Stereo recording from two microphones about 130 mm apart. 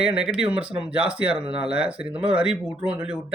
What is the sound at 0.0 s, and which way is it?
Speech, 5° right (ahead or behind).